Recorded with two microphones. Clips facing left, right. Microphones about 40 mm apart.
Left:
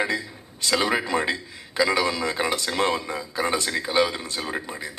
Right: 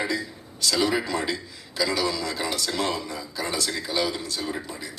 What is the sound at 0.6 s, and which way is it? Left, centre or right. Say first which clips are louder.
Speech: left 1 dB; left.